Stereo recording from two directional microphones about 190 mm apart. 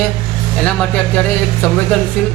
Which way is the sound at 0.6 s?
5° left (ahead or behind).